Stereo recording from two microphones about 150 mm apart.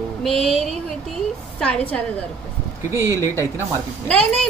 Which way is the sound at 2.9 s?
20° right (ahead or behind).